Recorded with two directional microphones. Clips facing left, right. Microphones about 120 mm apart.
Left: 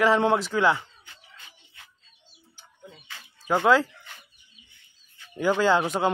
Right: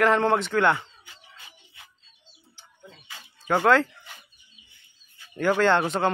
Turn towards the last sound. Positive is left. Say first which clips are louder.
# even
turn(degrees=5)  # may be behind; listen again after turning